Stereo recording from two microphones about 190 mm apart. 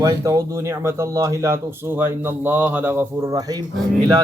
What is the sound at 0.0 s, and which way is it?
Speech, 15° right (ahead or behind).